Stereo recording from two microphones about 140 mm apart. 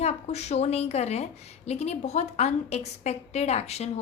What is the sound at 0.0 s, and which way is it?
A woman's voice, 50° left (ahead or behind).